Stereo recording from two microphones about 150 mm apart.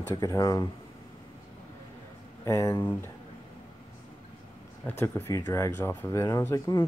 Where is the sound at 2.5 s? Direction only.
20° left (ahead or behind).